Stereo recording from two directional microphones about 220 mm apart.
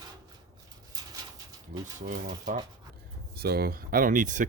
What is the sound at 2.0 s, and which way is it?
Speech, 35° right (ahead or behind).